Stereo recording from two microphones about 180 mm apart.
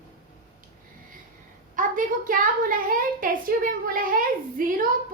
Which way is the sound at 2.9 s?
50° right (ahead or behind).